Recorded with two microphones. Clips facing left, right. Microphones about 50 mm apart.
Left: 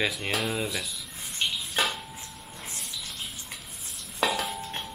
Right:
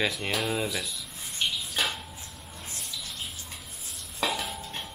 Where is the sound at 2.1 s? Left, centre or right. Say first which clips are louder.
Left 2 dB; left.